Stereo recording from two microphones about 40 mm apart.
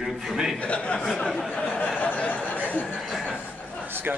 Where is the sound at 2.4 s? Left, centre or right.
Left.